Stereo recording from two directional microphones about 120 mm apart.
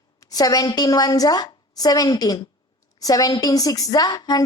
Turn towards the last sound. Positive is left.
turn(degrees=30)  # may be behind; listen again after turning